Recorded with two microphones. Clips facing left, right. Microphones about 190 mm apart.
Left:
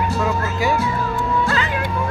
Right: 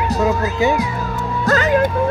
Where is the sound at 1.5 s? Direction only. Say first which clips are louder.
Right 7 dB; 40° right (ahead or behind).